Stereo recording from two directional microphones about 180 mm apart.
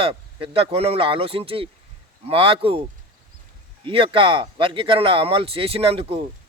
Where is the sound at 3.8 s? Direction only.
30° right (ahead or behind).